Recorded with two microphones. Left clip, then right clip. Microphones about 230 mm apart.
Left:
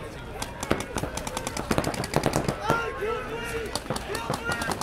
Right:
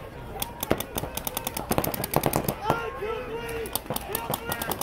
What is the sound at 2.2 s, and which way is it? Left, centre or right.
Machine gun, centre.